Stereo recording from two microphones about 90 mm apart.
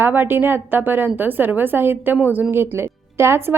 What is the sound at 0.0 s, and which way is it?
A woman's voice, 25° right (ahead or behind).